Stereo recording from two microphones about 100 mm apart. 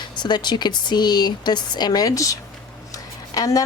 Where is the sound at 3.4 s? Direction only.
35° left (ahead or behind).